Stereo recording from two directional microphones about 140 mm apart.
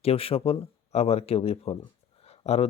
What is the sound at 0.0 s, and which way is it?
Speech, 45° left (ahead or behind).